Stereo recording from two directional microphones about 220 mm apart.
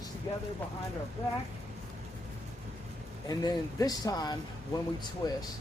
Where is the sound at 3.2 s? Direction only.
15° left (ahead or behind).